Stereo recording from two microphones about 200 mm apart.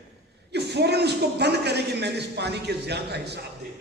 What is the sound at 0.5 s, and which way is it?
A man's voice, 55° right (ahead or behind).